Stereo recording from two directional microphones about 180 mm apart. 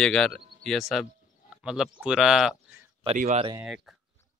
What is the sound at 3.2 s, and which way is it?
Speech, 40° right (ahead or behind).